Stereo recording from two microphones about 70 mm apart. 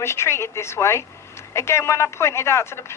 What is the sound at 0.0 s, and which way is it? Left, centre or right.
A woman's voice, left.